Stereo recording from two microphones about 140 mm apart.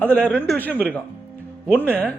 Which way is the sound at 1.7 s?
15° right (ahead or behind).